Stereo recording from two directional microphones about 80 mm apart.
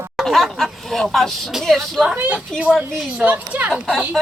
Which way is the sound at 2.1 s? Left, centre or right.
Centre.